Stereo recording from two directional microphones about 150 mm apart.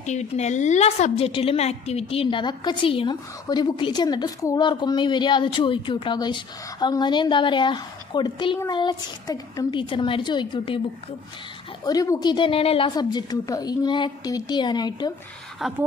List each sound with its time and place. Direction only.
0.0 s a woman's voice: 50° left (ahead or behind); by 10.8 s 35° left (ahead or behind)
11.8 s a woman's voice: 25° left (ahead or behind)
15.6 s speech: centre (ahead or behind)